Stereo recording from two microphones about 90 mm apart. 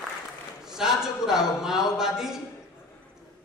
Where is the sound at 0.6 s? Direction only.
5° right (ahead or behind).